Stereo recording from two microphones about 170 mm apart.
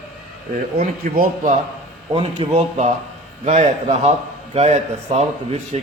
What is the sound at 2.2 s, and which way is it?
A man's voice, 40° right (ahead or behind).